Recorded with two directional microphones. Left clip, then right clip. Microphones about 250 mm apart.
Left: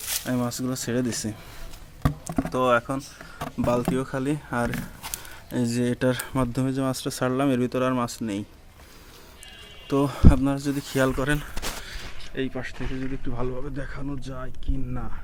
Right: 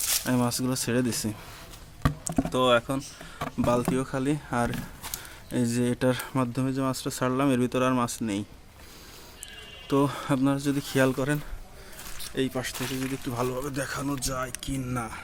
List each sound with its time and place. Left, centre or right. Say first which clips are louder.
0.3 s speech: left 1 dB; centre
2.4 s speech: left 1 dB; centre
9.9 s speech: left 2 dB; centre
12.3 s speech: right 1 dB; centre
12.8 s speech: right 1 dB; centre